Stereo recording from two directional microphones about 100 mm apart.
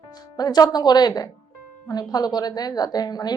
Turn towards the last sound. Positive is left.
turn(degrees=40)  # may be behind; listen again after turning